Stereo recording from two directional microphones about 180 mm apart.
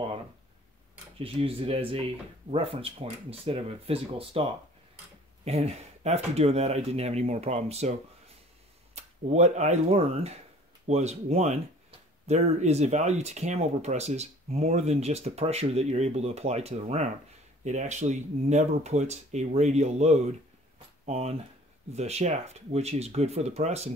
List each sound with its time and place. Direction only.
1.1 s speech: 30° right (ahead or behind)
8.9 s speech: 40° right (ahead or behind)